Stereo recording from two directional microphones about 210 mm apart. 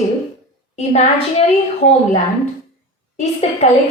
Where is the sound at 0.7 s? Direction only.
30° left (ahead or behind).